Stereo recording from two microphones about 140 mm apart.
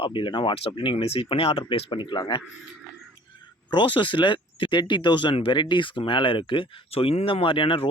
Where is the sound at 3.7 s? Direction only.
35° left (ahead or behind).